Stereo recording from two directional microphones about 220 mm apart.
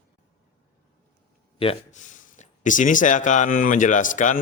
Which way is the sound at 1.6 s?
30° left (ahead or behind).